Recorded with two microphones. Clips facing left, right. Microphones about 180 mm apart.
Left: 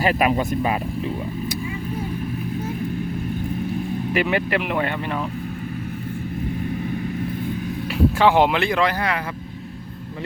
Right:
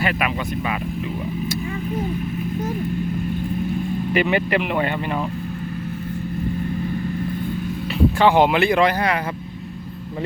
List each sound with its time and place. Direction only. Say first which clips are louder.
0.0 s speech: left 4 dB; 35° left (ahead or behind)
4.1 s speech: right 2 dB; centre (ahead or behind)
8.2 s speech: right 2 dB; centre (ahead or behind); by 9.1 s 15° right (ahead or behind)